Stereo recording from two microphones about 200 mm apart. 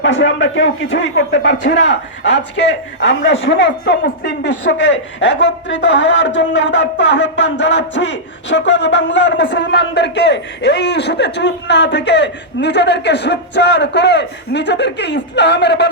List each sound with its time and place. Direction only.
0.0 s speech: 65° left (ahead or behind)